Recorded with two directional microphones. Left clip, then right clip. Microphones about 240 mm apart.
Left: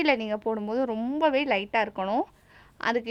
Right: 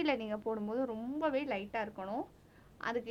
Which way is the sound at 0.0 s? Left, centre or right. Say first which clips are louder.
Left 10 dB; left.